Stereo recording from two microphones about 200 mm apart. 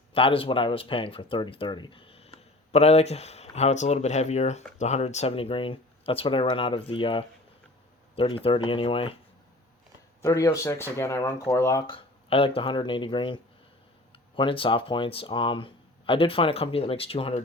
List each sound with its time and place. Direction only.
0.1 s speech: 25° left (ahead or behind)
10.2 s speech: 15° left (ahead or behind)